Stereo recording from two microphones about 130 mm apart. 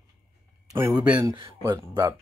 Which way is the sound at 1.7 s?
40° right (ahead or behind).